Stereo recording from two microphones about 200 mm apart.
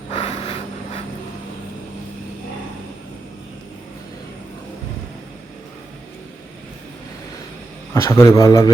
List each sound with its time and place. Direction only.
0.1 s vehicle: 30° left (ahead or behind)
7.9 s a man's voice: 15° left (ahead or behind)